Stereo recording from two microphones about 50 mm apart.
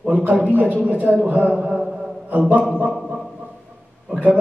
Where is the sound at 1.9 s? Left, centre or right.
Centre.